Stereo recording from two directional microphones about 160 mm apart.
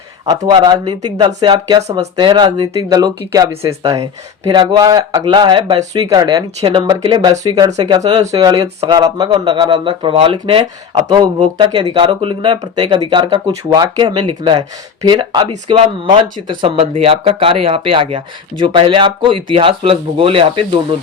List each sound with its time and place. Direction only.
0.3 s speech: 25° right (ahead or behind)